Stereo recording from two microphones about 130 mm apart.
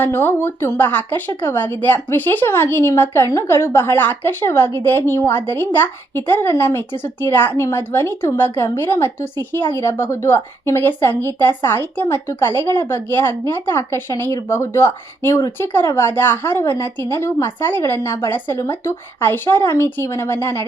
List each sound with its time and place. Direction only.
0.0 s speech: 15° left (ahead or behind)